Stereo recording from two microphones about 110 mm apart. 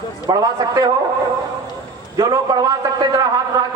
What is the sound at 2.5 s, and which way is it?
A man's voice, 40° right (ahead or behind).